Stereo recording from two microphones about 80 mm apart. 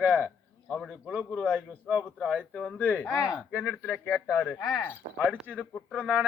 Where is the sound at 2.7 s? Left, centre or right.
Centre.